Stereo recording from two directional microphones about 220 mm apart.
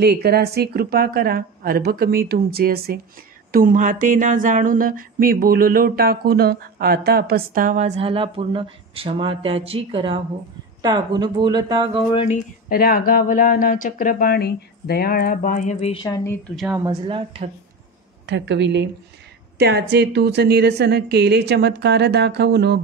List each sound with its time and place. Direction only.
0.0 s a woman's voice: 45° right (ahead or behind)
3.5 s a sound: 35° right (ahead or behind)
10.8 s speech: 20° right (ahead or behind)
12.1 s speech: 25° left (ahead or behind)
12.6 s speech: 40° left (ahead or behind)
16.5 s a woman's voice: 5° right (ahead or behind)
16.8 s speech: 25° right (ahead or behind)
18.2 s a woman's voice: 55° right (ahead or behind)